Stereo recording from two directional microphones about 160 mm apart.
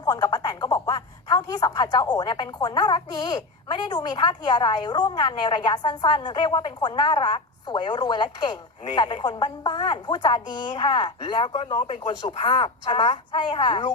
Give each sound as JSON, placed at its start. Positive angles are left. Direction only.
{"t": 0.0, "sound": "a woman's voice", "side_deg": 25}